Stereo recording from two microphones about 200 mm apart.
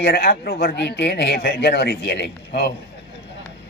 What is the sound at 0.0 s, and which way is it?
A man's voice, 50° left (ahead or behind).